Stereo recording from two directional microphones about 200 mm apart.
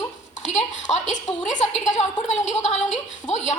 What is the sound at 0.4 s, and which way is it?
A woman's voice, 35° left (ahead or behind).